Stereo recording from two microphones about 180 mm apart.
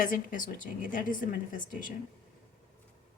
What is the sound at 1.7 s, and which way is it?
Speech, 50° left (ahead or behind).